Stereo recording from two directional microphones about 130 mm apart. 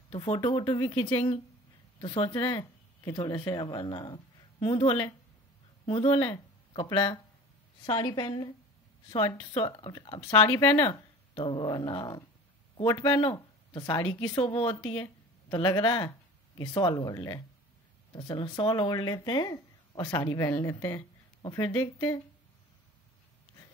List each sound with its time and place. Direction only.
0.2 s speech: 40° left (ahead or behind)
2.4 s speech: 30° left (ahead or behind)
9.5 s speech: 40° left (ahead or behind)
10.5 s speech: 25° left (ahead or behind)
11.3 s speech: 40° left (ahead or behind)
15.5 s speech: 35° left (ahead or behind)
20.2 s speech: 25° left (ahead or behind)
21.4 s speech: 35° left (ahead or behind)
21.9 s speech: 20° left (ahead or behind)